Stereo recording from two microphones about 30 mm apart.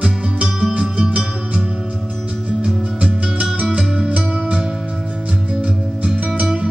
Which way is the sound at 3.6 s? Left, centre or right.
Right.